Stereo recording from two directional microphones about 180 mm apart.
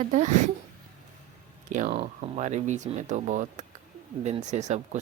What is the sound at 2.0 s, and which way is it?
Speech, 40° right (ahead or behind).